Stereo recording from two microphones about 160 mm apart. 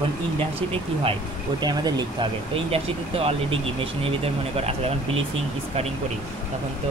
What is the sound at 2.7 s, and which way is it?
Speech, 35° right (ahead or behind).